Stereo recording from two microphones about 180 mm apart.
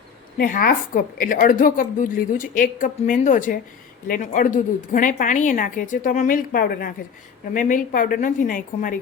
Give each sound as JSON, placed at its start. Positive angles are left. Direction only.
{"t": 0.3, "sound": "a woman's voice", "side_deg": 50}